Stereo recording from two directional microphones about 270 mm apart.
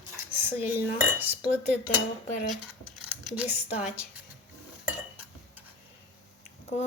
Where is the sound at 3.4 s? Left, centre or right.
Centre.